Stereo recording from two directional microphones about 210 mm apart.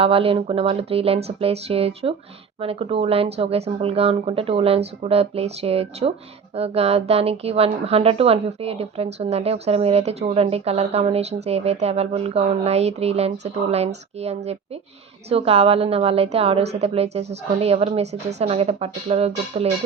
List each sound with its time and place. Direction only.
0.0 s speech: 25° right (ahead or behind)